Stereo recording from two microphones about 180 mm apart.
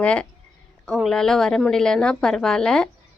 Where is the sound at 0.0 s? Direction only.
5° left (ahead or behind).